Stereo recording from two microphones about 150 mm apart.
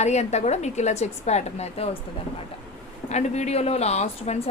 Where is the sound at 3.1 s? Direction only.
50° left (ahead or behind).